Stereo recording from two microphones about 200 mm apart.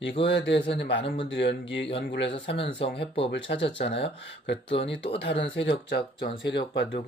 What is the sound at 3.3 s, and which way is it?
Speech, 60° left (ahead or behind).